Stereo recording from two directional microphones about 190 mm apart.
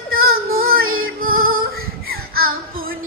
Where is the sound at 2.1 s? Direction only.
50° right (ahead or behind).